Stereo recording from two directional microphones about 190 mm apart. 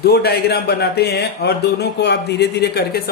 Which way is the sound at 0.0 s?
55° left (ahead or behind).